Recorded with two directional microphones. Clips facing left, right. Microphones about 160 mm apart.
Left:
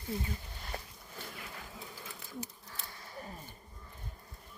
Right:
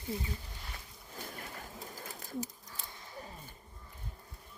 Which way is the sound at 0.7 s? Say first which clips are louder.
Left 9 dB; 45° left (ahead or behind).